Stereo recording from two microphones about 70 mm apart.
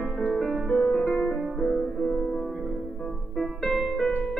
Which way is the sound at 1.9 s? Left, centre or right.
Centre.